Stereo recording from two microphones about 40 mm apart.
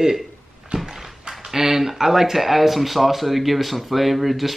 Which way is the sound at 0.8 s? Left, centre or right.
Centre.